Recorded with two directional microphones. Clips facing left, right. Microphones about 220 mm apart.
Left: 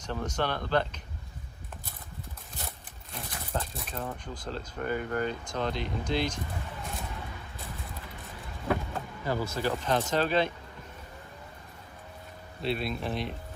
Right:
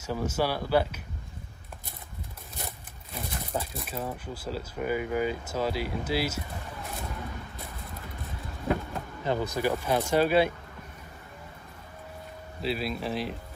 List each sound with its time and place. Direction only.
0.0 s speech: 5° right (ahead or behind)
3.1 s speech: centre (ahead or behind)
9.2 s speech: 20° right (ahead or behind)
12.6 s speech: centre (ahead or behind)